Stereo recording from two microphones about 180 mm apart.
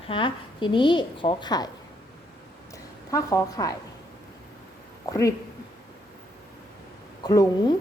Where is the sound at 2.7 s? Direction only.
15° left (ahead or behind).